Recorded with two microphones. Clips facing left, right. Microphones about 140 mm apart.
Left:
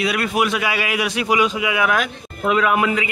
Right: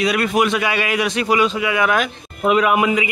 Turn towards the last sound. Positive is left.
turn(degrees=-15)  # may be behind; listen again after turning